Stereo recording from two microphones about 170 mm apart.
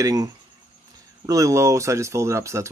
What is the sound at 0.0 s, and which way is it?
Speech, 20° right (ahead or behind).